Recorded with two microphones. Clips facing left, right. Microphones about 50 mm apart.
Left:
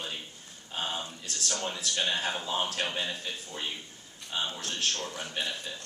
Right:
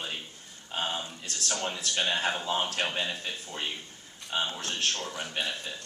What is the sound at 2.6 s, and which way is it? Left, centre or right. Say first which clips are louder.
Speech: right 2 dB; right.